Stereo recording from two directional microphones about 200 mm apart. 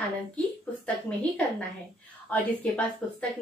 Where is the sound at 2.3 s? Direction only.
10° left (ahead or behind).